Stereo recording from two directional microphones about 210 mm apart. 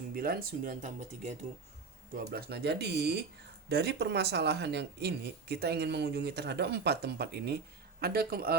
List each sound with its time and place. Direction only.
0.1 s speech: 45° right (ahead or behind)
2.1 s speech: 50° right (ahead or behind)